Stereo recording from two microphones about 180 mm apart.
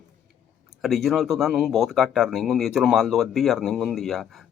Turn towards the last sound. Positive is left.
turn(degrees=0)  # may be behind; listen again after turning